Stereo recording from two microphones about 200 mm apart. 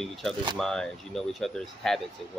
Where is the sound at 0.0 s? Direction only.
Centre (ahead or behind).